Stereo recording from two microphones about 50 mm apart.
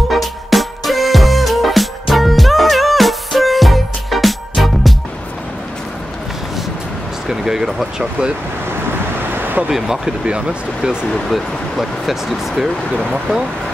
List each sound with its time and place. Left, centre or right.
0.1 s music: centre
7.2 s a sound: centre
9.3 s vehicle: right
9.7 s speech: centre
10.2 s speech: right
11.2 s speech: centre